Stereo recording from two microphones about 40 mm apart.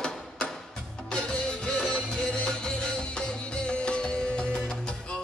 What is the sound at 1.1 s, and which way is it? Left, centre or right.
Music, left.